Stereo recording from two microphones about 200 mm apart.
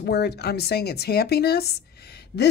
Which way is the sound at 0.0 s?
55° left (ahead or behind).